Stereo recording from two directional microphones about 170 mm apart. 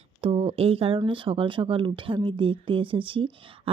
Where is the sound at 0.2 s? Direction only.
35° right (ahead or behind).